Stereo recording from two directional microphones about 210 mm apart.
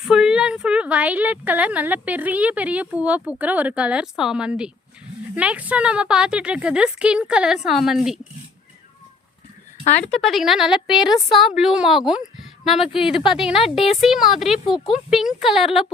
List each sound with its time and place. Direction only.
0.0 s a woman's voice: 5° right (ahead or behind)
10.0 s a woman's voice: 5° left (ahead or behind)